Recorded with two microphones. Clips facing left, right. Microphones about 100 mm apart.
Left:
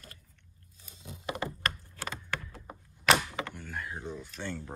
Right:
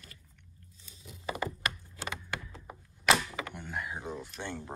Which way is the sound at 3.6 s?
15° right (ahead or behind).